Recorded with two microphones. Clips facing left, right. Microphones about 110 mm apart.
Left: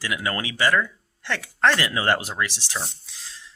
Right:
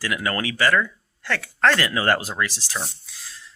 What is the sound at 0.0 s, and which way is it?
Speech, 20° left (ahead or behind).